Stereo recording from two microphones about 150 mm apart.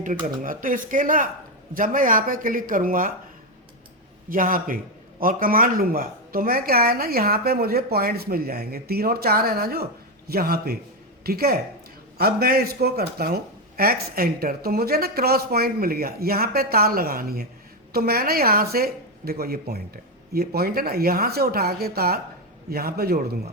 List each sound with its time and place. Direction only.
0.0 s speech: 65° right (ahead or behind)
4.3 s speech: 65° right (ahead or behind); by 23.4 s 90° right